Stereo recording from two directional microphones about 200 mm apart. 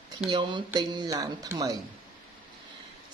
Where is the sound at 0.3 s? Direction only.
25° right (ahead or behind).